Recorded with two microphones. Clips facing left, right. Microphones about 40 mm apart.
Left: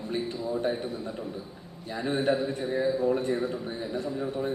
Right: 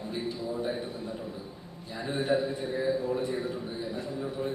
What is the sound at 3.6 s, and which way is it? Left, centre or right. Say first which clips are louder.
Speech: left 2 dB; left.